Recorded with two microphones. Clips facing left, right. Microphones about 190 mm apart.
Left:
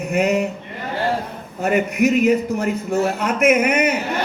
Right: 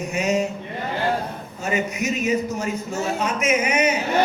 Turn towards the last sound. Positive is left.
turn(degrees=60)  # may be behind; listen again after turning